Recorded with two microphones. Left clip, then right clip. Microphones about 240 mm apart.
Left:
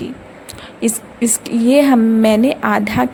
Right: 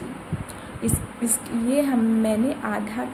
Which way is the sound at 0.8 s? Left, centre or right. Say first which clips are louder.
Left 9 dB; left.